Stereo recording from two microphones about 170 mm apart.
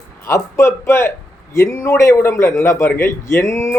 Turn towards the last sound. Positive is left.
turn(degrees=15)  # may be behind; listen again after turning